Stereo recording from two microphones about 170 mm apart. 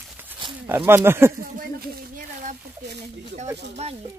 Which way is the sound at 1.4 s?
60° right (ahead or behind).